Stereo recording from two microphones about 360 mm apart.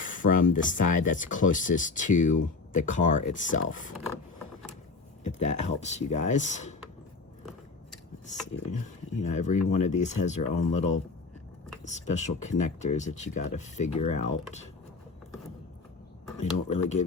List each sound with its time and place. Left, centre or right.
0.0 s a sound: left
0.5 s speech: left
5.2 s speech: centre
9.2 s speech: centre
16.4 s speech: centre